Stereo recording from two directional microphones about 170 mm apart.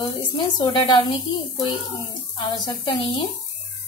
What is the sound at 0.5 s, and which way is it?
A woman's voice, 25° left (ahead or behind).